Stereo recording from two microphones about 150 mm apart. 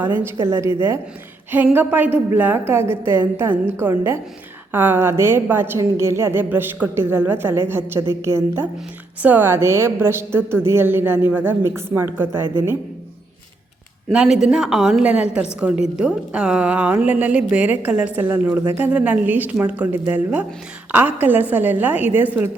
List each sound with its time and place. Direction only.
0.4 s a woman's voice: 20° right (ahead or behind)
14.1 s a woman's voice: 5° right (ahead or behind)